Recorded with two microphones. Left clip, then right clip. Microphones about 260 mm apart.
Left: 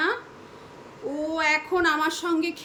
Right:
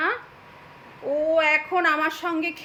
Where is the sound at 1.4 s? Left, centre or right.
Centre.